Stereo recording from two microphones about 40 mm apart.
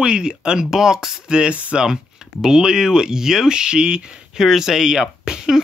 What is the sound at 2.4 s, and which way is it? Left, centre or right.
Speech, centre.